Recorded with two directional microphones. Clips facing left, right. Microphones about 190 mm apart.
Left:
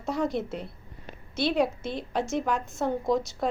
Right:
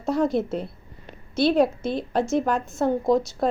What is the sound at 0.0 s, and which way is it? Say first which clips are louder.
A woman's voice: right 6 dB; 30° right (ahead or behind).